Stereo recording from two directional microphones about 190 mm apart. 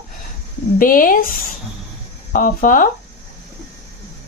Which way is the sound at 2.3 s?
45° left (ahead or behind).